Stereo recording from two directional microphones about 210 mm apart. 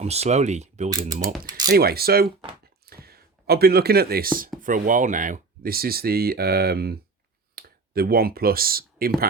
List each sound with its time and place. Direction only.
0.0 s speech: 30° right (ahead or behind)
1.6 s speech: 45° right (ahead or behind)
2.8 s chopping: 45° right (ahead or behind)
4.6 s speech: 40° right (ahead or behind)